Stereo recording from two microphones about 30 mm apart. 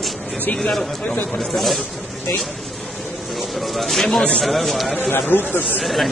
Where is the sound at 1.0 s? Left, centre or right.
Left.